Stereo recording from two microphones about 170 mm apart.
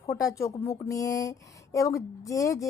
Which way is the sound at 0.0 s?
20° left (ahead or behind).